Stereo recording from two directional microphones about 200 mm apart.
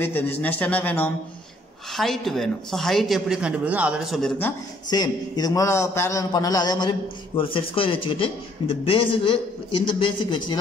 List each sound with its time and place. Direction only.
0.0 s a man's voice: 10° left (ahead or behind)
4.8 s a man's voice: 20° left (ahead or behind)